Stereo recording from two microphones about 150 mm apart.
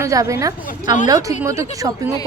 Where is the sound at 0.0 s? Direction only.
20° right (ahead or behind).